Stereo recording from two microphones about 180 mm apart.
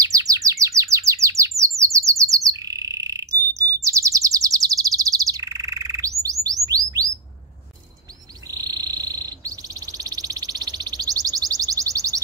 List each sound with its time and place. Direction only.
0.0 s bird: 20° right (ahead or behind)
8.5 s frog: 20° right (ahead or behind)